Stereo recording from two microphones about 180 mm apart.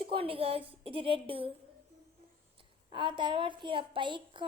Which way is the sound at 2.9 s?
25° right (ahead or behind).